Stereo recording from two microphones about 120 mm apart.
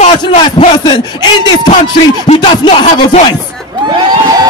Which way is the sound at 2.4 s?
40° left (ahead or behind).